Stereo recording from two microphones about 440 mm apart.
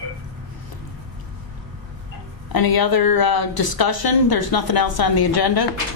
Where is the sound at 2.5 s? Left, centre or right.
Left.